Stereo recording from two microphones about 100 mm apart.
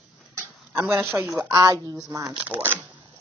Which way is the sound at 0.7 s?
25° right (ahead or behind).